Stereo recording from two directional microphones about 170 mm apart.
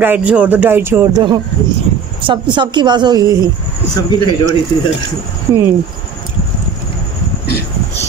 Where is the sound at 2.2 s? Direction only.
30° right (ahead or behind).